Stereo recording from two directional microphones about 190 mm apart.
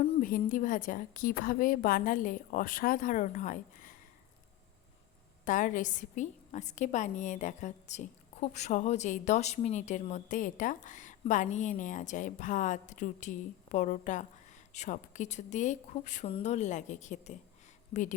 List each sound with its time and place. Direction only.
0.2 s a woman's voice: 45° left (ahead or behind)
5.5 s a woman's voice: 45° left (ahead or behind)